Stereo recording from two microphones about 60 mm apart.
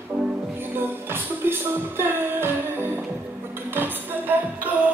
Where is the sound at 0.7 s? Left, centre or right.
Right.